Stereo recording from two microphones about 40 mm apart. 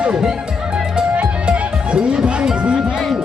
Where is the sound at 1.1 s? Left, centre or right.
Right.